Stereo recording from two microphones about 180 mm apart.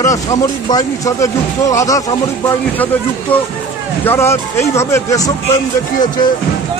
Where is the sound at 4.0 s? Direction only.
15° left (ahead or behind).